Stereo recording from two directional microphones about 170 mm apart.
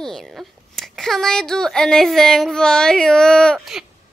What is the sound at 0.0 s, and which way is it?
A woman's voice, centre (ahead or behind).